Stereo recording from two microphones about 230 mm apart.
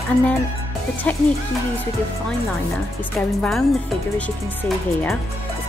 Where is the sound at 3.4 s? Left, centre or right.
Centre.